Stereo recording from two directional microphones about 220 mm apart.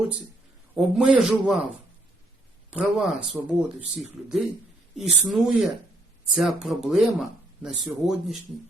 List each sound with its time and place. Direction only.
0.8 s speech: 5° right (ahead or behind)
2.6 s speech: centre (ahead or behind)